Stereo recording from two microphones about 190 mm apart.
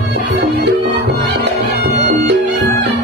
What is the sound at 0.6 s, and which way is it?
Music, 60° right (ahead or behind).